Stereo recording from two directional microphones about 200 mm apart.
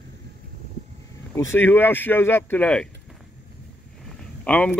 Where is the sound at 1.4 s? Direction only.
10° left (ahead or behind).